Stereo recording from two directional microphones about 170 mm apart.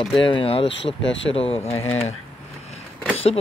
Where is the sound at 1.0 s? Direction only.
90° left.